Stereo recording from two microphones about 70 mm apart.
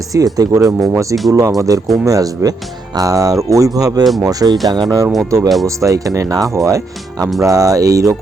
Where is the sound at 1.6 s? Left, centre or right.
Right.